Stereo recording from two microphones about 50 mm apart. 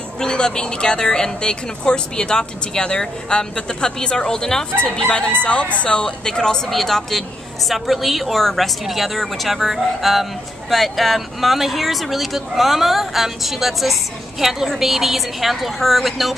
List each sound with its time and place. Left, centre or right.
0.2 s a woman's voice: centre
4.7 s crowing: centre
5.8 s a woman's voice: centre